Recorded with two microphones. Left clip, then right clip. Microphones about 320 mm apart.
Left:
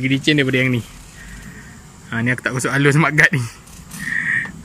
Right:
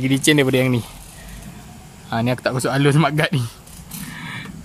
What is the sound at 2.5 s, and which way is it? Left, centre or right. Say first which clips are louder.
Speech: left 3 dB; centre.